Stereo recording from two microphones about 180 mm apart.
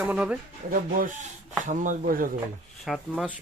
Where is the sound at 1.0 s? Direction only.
45° right (ahead or behind).